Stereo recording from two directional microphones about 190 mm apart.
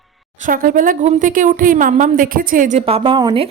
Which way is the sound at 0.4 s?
45° right (ahead or behind).